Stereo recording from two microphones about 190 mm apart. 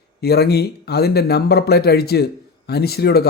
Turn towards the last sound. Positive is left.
turn(degrees=55)  # may be behind; listen again after turning